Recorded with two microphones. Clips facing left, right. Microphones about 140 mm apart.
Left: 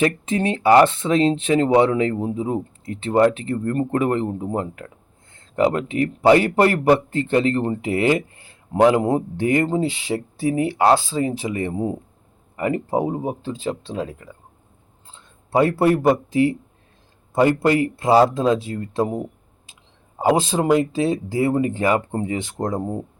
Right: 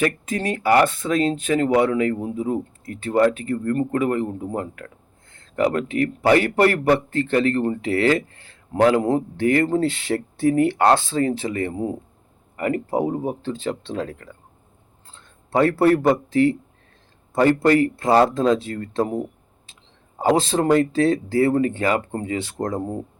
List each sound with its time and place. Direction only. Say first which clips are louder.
0.0 s a man's voice: left 3 dB; 25° left (ahead or behind); by 14.3 s 10° left (ahead or behind)
15.5 s speech: even; 10° left (ahead or behind)